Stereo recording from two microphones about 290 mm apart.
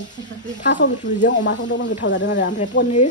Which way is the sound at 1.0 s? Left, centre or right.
Left.